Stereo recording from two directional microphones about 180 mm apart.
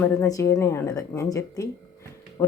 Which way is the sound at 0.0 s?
15° left (ahead or behind).